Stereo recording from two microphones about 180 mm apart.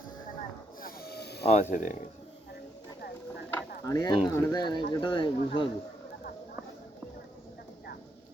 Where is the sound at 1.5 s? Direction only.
35° left (ahead or behind).